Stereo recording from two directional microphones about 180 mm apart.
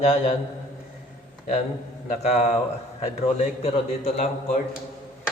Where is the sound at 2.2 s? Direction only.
40° left (ahead or behind).